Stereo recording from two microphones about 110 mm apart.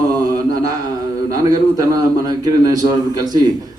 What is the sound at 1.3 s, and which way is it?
A man's voice, 35° right (ahead or behind).